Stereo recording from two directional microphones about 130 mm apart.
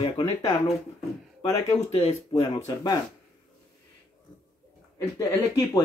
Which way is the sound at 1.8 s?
55° left (ahead or behind).